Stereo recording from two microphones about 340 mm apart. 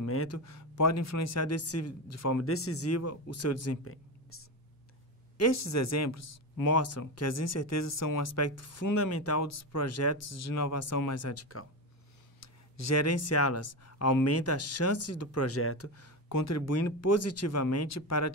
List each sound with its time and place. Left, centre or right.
0.0 s speech: left
5.4 s speech: left